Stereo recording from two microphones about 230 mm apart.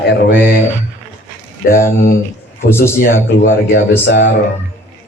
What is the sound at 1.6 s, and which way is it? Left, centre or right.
Speech, left.